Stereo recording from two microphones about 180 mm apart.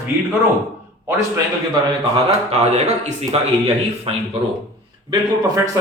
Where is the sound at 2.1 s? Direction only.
35° right (ahead or behind).